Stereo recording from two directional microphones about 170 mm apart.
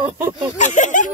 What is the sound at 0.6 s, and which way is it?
Speech, 45° left (ahead or behind).